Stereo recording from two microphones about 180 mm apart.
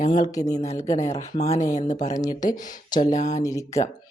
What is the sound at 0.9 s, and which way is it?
Speech, 35° left (ahead or behind).